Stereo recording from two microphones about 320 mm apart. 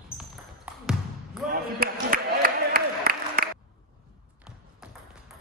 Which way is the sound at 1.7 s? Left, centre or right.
Right.